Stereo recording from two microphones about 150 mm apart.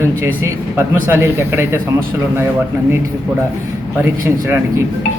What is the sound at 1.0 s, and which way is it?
Speech, 15° right (ahead or behind).